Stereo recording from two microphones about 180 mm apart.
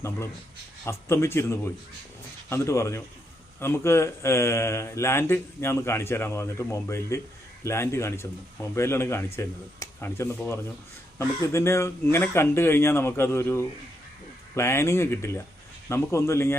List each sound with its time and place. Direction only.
0.9 s speech: 15° left (ahead or behind)